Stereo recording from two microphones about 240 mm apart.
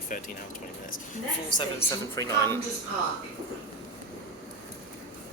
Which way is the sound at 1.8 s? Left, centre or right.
Centre.